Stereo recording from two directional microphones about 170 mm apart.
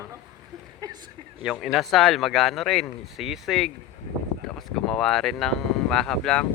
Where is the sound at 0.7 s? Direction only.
25° right (ahead or behind).